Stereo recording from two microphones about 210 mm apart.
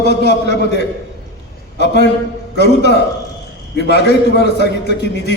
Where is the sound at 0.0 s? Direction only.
55° left (ahead or behind).